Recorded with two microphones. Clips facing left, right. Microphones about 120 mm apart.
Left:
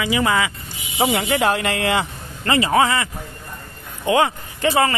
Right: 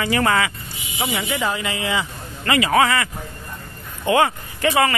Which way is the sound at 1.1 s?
70° left (ahead or behind).